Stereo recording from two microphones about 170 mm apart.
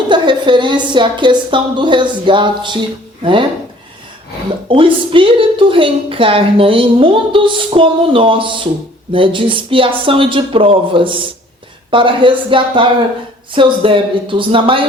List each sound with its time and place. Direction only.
0.1 s a woman's voice: 25° right (ahead or behind)
4.7 s a woman's voice: 30° right (ahead or behind)